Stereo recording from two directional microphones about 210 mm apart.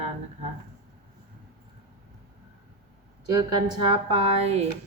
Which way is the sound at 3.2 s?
20° right (ahead or behind).